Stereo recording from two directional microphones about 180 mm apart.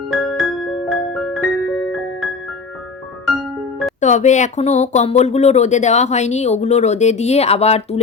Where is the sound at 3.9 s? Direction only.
40° left (ahead or behind).